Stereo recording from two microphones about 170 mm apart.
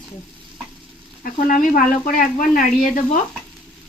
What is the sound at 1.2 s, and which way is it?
Speech, 50° left (ahead or behind).